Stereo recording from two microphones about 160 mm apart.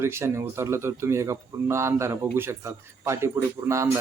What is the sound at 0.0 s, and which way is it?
A man's voice, 15° right (ahead or behind).